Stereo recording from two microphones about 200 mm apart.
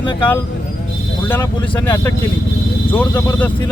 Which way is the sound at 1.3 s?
10° left (ahead or behind).